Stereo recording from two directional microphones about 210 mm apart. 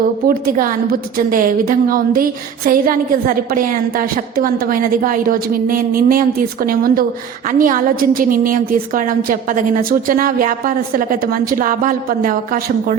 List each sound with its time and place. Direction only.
0.3 s a woman's voice: 45° right (ahead or behind)